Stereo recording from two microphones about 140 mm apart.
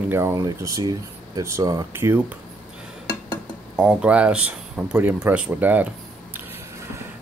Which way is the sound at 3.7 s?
5° right (ahead or behind).